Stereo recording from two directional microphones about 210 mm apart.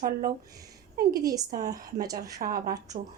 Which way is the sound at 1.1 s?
15° right (ahead or behind).